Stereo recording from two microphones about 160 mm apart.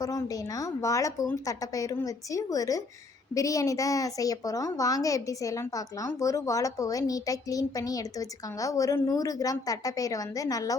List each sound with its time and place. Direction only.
0.0 s a woman's voice: 20° left (ahead or behind)